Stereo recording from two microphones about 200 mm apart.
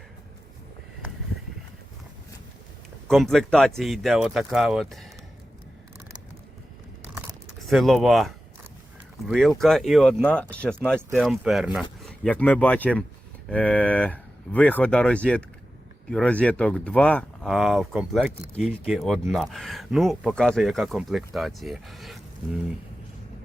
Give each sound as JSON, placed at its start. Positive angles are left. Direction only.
{"t": 3.1, "sound": "speech", "side_deg": 0}
{"t": 7.7, "sound": "speech", "side_deg": 0}